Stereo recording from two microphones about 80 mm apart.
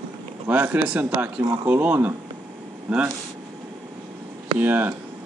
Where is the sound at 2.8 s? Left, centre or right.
Centre.